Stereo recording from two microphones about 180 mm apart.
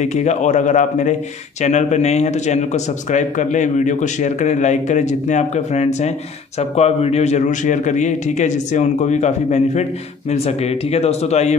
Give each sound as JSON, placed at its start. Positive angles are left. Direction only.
{"t": 0.0, "sound": "speech", "side_deg": 40}